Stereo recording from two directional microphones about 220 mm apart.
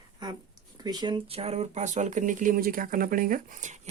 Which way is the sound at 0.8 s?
20° right (ahead or behind).